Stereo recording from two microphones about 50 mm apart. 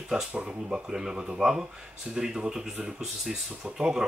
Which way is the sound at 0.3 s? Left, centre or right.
Centre.